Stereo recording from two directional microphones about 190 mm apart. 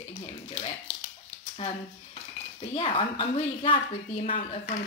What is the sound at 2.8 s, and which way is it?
Speech, 30° left (ahead or behind).